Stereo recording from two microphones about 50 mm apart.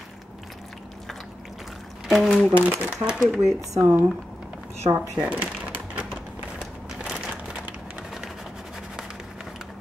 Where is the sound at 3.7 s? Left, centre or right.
Right.